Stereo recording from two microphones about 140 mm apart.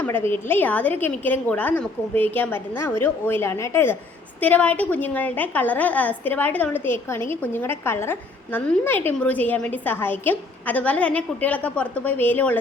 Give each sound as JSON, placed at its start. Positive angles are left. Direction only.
{"t": 0.0, "sound": "a woman's voice", "side_deg": 15}